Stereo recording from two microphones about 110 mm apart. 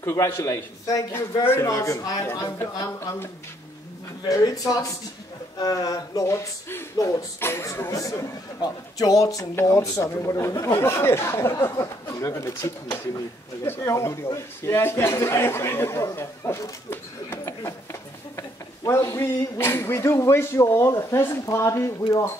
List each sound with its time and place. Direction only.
0.0 s speech: 25° left (ahead or behind)
4.3 s speech: 35° left (ahead or behind)
18.9 s speech: 25° left (ahead or behind)